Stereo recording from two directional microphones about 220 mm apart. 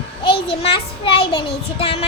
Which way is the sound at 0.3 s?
25° left (ahead or behind).